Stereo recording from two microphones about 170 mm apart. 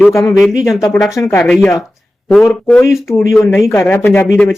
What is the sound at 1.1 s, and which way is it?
Speech, 15° left (ahead or behind).